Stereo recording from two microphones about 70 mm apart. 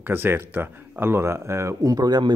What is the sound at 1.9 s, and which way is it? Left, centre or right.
Speech, right.